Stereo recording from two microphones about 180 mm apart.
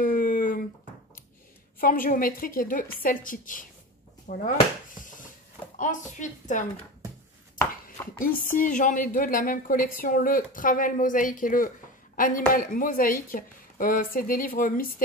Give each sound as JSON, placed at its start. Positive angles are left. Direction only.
{"t": 0.0, "sound": "a sound", "side_deg": 50}
{"t": 1.8, "sound": "a woman's voice", "side_deg": 50}
{"t": 5.8, "sound": "a woman's voice", "side_deg": 45}
{"t": 8.2, "sound": "a woman's voice", "side_deg": 45}